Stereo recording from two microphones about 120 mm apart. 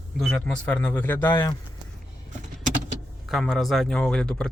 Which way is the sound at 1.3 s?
40° left (ahead or behind).